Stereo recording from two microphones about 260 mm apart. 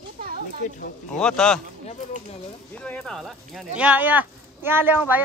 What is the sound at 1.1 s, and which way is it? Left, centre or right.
Speech, centre.